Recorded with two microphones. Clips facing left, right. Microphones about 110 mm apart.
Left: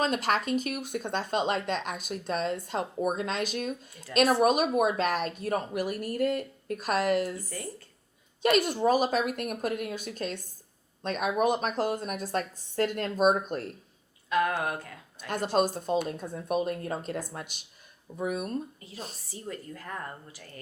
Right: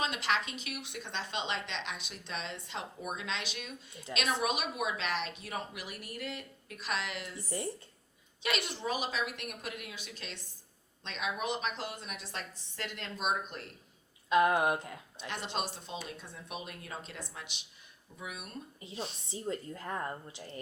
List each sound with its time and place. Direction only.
0.0 s speech: 45° left (ahead or behind)
14.3 s speech: 20° right (ahead or behind)
15.5 s speech: 45° left (ahead or behind)
19.3 s speech: 25° right (ahead or behind)